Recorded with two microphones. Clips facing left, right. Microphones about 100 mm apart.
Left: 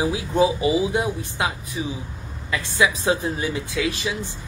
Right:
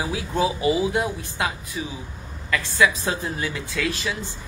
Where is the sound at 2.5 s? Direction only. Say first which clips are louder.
Right 1 dB; 20° left (ahead or behind).